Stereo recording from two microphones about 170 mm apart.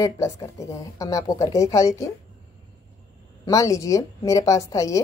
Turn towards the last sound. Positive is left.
turn(degrees=20)  # may be behind; listen again after turning